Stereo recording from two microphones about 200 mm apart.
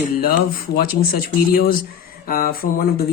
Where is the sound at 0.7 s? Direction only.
45° left (ahead or behind).